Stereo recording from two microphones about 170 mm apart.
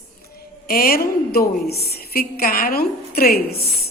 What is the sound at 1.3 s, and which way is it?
A woman's voice, 60° left (ahead or behind).